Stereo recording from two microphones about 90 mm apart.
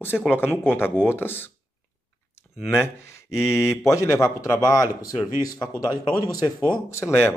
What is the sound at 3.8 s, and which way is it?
Speech, 35° left (ahead or behind).